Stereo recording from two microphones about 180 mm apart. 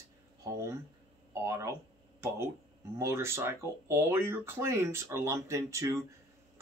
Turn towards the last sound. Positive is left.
turn(degrees=-15)  # may be behind; listen again after turning